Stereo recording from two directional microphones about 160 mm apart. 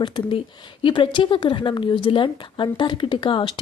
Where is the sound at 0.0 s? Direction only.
35° left (ahead or behind).